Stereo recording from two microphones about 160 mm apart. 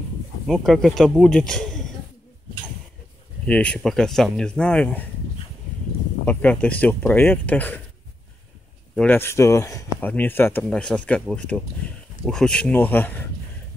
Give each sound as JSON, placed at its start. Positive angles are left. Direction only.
{"t": 0.5, "sound": "speech", "side_deg": 0}
{"t": 3.4, "sound": "speech", "side_deg": 10}
{"t": 6.2, "sound": "speech", "side_deg": 10}
{"t": 8.9, "sound": "speech", "side_deg": 10}